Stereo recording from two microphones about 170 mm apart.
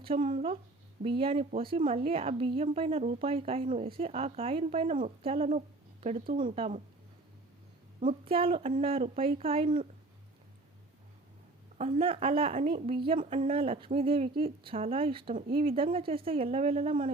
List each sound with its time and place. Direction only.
0.0 s speech: 30° right (ahead or behind)
3.7 s speech: 50° right (ahead or behind)
3.9 s speech: 35° right (ahead or behind)
8.2 s speech: 35° right (ahead or behind)
11.8 s speech: 35° right (ahead or behind)